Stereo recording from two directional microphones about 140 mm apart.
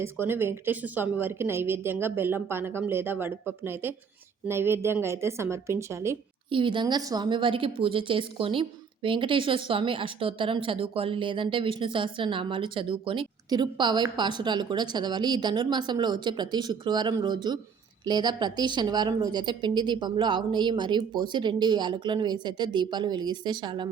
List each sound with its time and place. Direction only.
0.0 s a woman's voice: 15° right (ahead or behind)
6.5 s speech: 35° right (ahead or behind)